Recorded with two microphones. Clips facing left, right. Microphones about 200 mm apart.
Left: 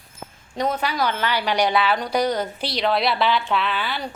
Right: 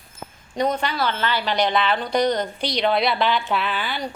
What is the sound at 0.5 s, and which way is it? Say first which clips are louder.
A woman's voice: right 1 dB; 5° left (ahead or behind).